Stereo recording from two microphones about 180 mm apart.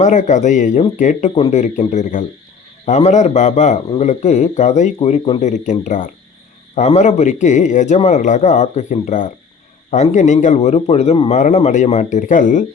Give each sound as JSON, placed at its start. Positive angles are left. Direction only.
{"t": 0.0, "sound": "a man's voice", "side_deg": 40}